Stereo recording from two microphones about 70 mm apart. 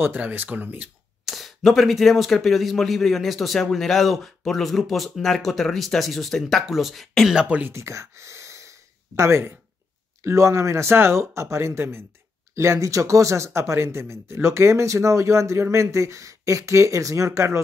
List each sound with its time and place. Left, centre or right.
0.0 s speech: right
1.2 s speech: centre
7.4 s speech: centre
7.7 s gasp: right
10.2 s speech: right